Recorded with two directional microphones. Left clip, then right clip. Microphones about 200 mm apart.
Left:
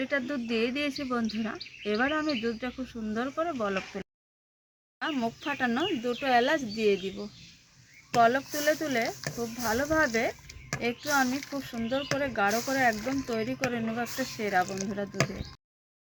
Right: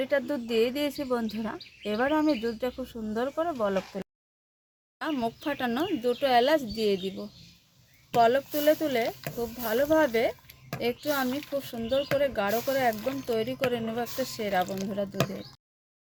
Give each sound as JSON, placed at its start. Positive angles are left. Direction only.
{"t": 0.0, "sound": "speech", "side_deg": -60}